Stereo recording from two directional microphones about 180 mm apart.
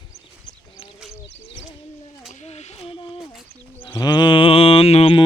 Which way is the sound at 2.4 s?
35° left (ahead or behind).